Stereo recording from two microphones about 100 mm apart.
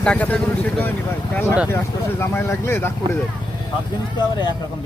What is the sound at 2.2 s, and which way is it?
Speech, 25° left (ahead or behind).